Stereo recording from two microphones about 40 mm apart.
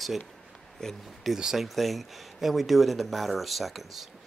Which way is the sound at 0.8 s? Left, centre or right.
Centre.